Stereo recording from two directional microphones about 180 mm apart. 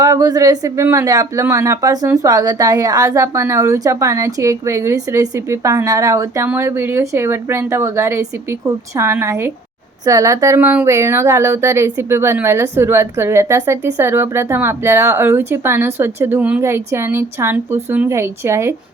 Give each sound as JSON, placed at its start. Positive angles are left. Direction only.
{"t": 0.0, "sound": "speech", "side_deg": -20}